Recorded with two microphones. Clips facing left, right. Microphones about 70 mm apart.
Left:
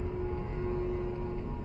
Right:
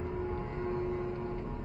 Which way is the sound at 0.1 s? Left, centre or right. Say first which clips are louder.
Even; centre.